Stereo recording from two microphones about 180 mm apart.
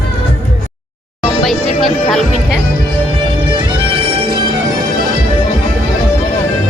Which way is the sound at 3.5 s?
25° right (ahead or behind).